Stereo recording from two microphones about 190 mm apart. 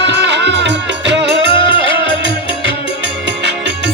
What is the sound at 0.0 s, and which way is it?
Music, 65° right (ahead or behind).